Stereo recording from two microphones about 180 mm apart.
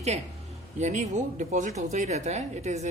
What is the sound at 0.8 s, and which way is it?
Speech, 40° right (ahead or behind).